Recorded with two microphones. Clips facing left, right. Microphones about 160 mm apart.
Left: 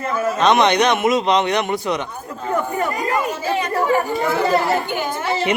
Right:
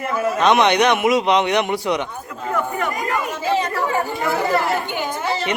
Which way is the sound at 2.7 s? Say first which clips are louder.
Left 2 dB; 35° left (ahead or behind).